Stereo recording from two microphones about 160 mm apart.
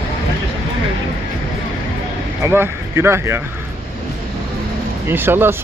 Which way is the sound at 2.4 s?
15° right (ahead or behind).